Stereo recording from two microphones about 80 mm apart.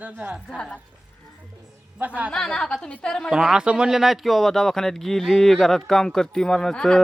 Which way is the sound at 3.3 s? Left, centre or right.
Centre.